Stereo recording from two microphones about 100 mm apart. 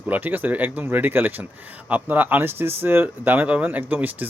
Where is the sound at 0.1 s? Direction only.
20° right (ahead or behind).